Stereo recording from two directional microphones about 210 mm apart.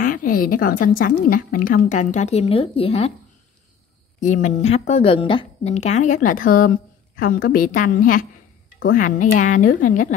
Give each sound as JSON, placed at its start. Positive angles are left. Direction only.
{"t": 0.0, "sound": "a woman's voice", "side_deg": 40}
{"t": 4.2, "sound": "a woman's voice", "side_deg": 35}